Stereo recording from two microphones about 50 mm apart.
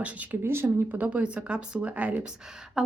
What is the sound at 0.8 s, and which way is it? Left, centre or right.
Speech, right.